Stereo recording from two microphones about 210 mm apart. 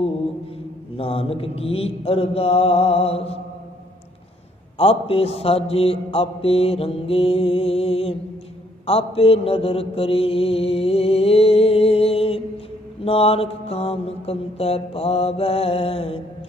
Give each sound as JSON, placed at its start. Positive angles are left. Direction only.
{"t": 0.9, "sound": "mantra", "side_deg": 25}
{"t": 4.7, "sound": "mantra", "side_deg": 25}